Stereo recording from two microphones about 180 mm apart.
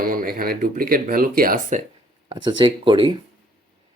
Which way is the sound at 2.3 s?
25° right (ahead or behind).